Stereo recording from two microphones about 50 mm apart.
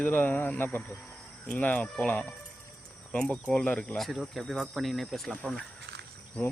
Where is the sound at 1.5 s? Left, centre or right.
Left.